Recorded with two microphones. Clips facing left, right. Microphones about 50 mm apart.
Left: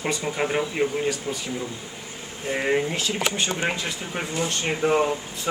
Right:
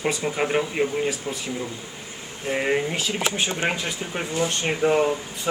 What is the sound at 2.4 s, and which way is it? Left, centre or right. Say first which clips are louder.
Speech: even; centre.